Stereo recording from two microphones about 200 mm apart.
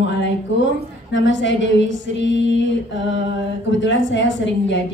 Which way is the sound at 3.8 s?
65° left (ahead or behind).